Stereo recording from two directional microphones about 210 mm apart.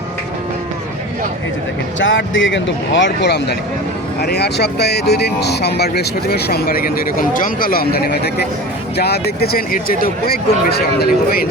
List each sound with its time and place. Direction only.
2.0 s speech: 65° left (ahead or behind); by 11.4 s 50° left (ahead or behind)